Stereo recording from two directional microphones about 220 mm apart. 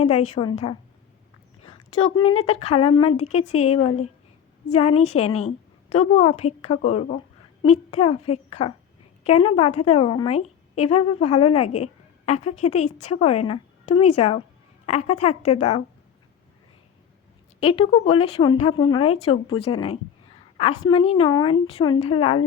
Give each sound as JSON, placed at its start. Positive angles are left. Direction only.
{"t": 0.0, "sound": "a woman's voice", "side_deg": 30}
{"t": 1.6, "sound": "a sound", "side_deg": 25}
{"t": 2.5, "sound": "a woman's voice", "side_deg": 25}
{"t": 17.6, "sound": "a woman's voice", "side_deg": 25}